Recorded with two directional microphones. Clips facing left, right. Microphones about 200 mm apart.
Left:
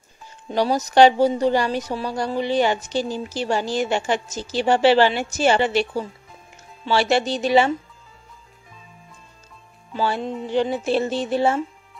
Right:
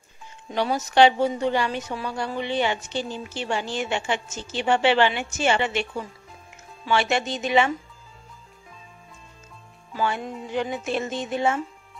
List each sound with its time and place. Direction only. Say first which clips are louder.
0.5 s a woman's voice: left 4 dB; 35° left (ahead or behind)
9.9 s a woman's voice: left 3 dB; 30° left (ahead or behind)